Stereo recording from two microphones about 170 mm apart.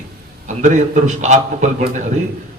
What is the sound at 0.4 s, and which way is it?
A man's voice, 45° right (ahead or behind).